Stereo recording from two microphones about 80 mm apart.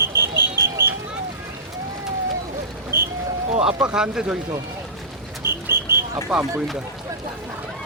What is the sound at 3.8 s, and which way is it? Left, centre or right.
Speech, centre.